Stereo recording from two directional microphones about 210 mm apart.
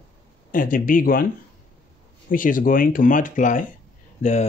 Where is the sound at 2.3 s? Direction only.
40° left (ahead or behind).